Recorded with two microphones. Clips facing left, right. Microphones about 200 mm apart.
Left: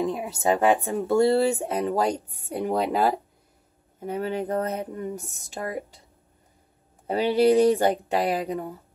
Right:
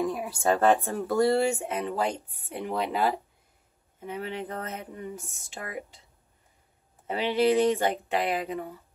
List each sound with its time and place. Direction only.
0.0 s speech: 20° left (ahead or behind)
7.1 s speech: 40° left (ahead or behind)